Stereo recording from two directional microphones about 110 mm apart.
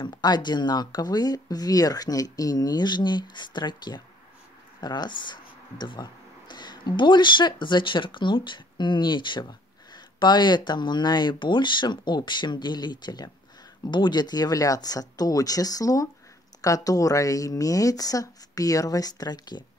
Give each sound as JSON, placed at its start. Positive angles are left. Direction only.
{"t": 0.0, "sound": "speech", "side_deg": 40}